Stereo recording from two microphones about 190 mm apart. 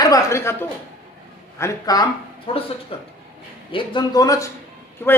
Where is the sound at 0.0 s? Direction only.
20° left (ahead or behind).